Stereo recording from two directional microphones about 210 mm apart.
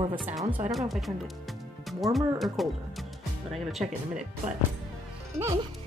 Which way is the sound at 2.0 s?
Centre (ahead or behind).